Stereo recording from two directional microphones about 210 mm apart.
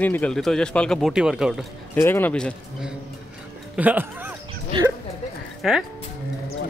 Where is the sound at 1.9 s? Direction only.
10° left (ahead or behind).